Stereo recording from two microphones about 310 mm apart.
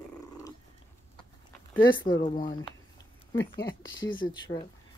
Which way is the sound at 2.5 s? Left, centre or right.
Centre.